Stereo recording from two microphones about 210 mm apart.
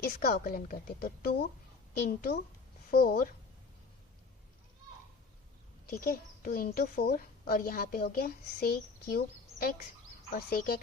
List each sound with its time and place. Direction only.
0.0 s a woman's voice: 45° left (ahead or behind)
5.8 s a child's voice: 45° left (ahead or behind)